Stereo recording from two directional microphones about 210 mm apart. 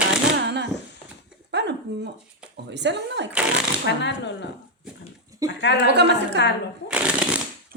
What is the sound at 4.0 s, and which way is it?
Speech, 55° left (ahead or behind).